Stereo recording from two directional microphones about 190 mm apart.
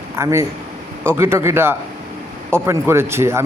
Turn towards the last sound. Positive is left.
turn(degrees=-15)  # may be behind; listen again after turning